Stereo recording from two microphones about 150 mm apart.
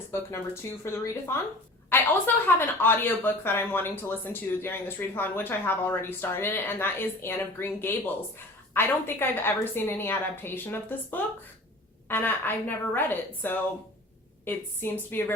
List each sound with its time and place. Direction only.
0.1 s speech: 15° left (ahead or behind)